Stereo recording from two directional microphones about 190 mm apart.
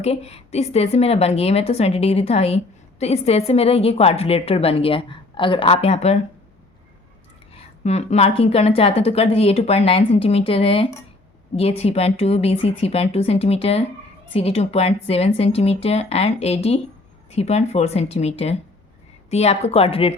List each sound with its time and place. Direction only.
0.0 s speech: 35° left (ahead or behind)
7.5 s speech: 35° left (ahead or behind)